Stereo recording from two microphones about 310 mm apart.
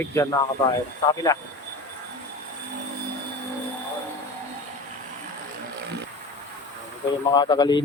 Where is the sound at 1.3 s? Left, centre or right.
Centre.